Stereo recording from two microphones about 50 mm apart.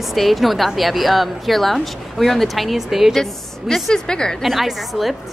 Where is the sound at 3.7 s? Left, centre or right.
Centre.